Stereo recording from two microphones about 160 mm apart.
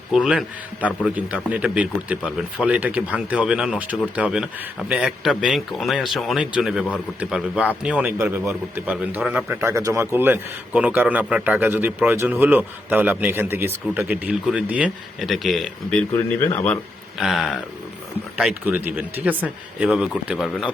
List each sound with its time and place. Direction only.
0.1 s a man's voice: centre (ahead or behind)
9.6 s a man's voice: 20° right (ahead or behind); by 16.0 s 5° left (ahead or behind)
16.1 s speech: 15° left (ahead or behind)
17.2 s a man's voice: centre (ahead or behind)